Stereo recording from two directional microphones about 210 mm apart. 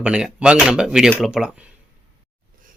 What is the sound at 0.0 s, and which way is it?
Speech, 5° right (ahead or behind).